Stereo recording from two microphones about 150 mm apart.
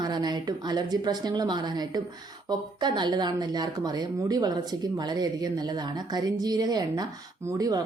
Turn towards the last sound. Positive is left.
turn(degrees=-25)  # may be behind; listen again after turning